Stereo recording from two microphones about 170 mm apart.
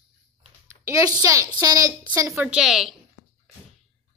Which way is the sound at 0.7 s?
15° right (ahead or behind).